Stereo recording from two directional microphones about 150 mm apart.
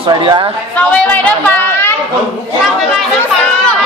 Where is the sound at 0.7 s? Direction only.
10° left (ahead or behind).